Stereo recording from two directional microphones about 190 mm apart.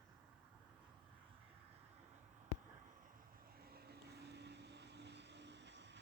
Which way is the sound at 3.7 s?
60° right (ahead or behind).